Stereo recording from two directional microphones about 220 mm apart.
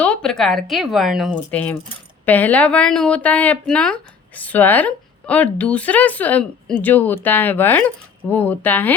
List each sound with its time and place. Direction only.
0.0 s speech: 5° left (ahead or behind)